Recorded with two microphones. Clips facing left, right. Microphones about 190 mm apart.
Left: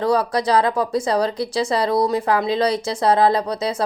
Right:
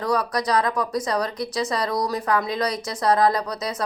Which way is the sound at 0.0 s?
30° left (ahead or behind).